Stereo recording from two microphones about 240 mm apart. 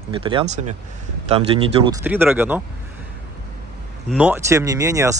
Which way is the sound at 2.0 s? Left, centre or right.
Centre.